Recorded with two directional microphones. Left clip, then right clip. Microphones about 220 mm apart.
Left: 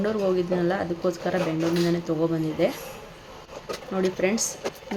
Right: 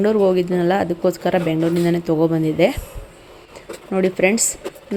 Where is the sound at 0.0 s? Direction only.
30° right (ahead or behind).